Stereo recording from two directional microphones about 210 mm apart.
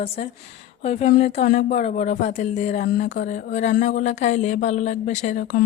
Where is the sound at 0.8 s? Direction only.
35° left (ahead or behind).